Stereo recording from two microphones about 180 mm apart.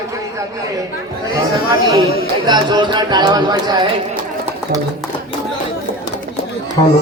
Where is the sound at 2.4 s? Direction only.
25° right (ahead or behind).